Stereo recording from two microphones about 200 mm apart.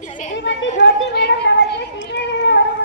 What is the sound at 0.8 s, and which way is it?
Cat, 55° left (ahead or behind).